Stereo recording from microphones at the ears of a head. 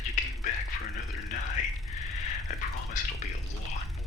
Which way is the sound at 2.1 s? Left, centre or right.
Left.